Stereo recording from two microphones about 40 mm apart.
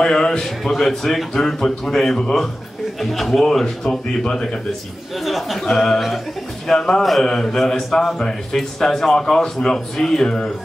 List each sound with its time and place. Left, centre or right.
0.0 s a sound: centre
0.7 s a man's voice: centre
3.9 s a man's voice: centre
5.2 s a man's voice: centre
5.9 s speech: centre
6.7 s a man's voice: centre
7.7 s a man's voice: centre